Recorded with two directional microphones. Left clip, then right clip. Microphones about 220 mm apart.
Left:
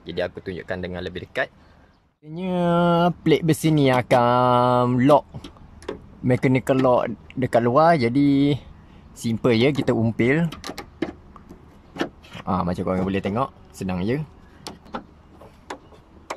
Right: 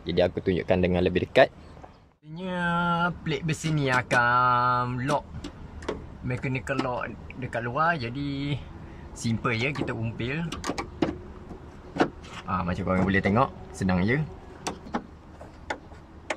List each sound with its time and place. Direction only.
0.0 s speech: centre (ahead or behind)
2.3 s speech: 25° left (ahead or behind)
6.2 s speech: 30° left (ahead or behind)
12.4 s speech: 20° left (ahead or behind)